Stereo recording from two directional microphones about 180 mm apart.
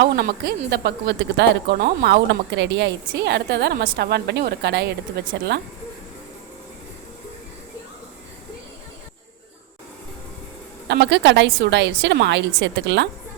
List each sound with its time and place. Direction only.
0.0 s a woman's voice: 65° right (ahead or behind)
10.8 s a woman's voice: 70° right (ahead or behind)